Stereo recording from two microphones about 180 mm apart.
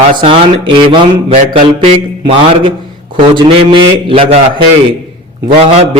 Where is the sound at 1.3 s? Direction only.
35° right (ahead or behind).